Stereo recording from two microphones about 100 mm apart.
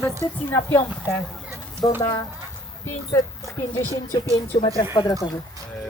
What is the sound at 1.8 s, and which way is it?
Speech, 45° left (ahead or behind).